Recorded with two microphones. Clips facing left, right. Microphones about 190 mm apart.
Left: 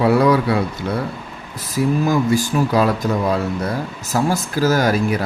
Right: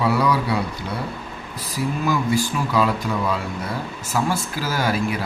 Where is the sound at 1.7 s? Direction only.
45° left (ahead or behind).